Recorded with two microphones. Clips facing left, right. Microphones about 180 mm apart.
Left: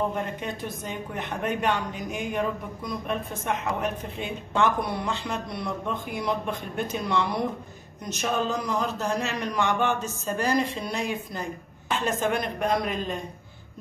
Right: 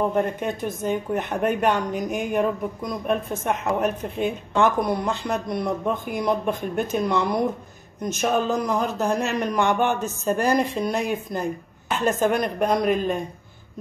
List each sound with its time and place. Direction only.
0.1 s a woman's voice: 50° right (ahead or behind)